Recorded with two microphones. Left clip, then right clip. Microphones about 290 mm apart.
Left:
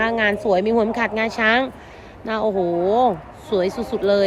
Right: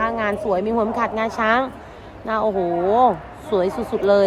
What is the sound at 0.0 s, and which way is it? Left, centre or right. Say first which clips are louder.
Speech: left 2 dB; left.